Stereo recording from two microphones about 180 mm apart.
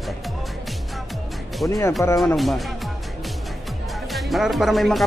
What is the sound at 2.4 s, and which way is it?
Speech, centre (ahead or behind).